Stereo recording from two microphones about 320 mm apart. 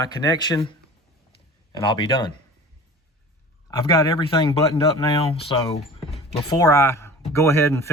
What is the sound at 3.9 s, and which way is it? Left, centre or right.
Speech, centre.